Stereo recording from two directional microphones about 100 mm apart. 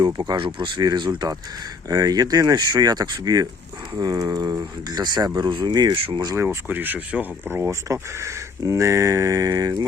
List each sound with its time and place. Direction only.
0.0 s speech: 40° right (ahead or behind)
6.0 s speech: 65° right (ahead or behind)
6.3 s speech: 25° right (ahead or behind)
8.2 s speech: 30° right (ahead or behind)